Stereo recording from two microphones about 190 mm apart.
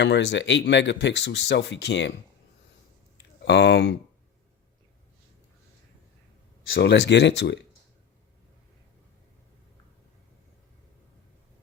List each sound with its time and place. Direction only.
0.0 s speech: 65° left (ahead or behind)
3.4 s speech: 65° left (ahead or behind)
6.7 s speech: 65° left (ahead or behind)